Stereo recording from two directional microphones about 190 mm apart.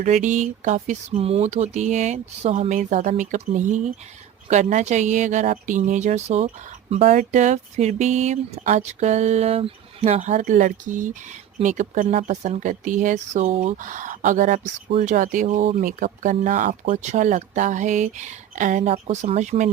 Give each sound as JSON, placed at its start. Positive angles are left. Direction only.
{"t": 0.0, "sound": "speech", "side_deg": -40}